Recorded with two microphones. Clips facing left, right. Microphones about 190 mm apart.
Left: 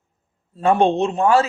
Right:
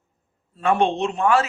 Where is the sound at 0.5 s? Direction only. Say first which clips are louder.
Left 4 dB; 30° left (ahead or behind).